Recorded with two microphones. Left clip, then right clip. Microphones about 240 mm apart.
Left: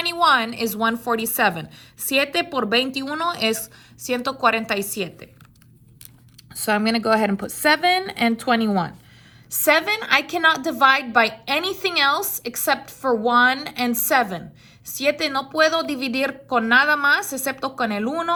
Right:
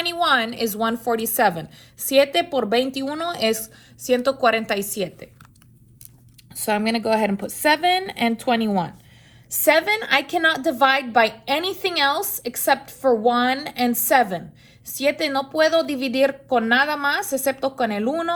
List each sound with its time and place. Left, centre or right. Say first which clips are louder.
0.2 s a woman's voice: left 2 dB; left
6.5 s a woman's voice: left 1 dB; left